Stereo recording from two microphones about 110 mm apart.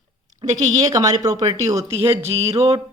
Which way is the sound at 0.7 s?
35° right (ahead or behind).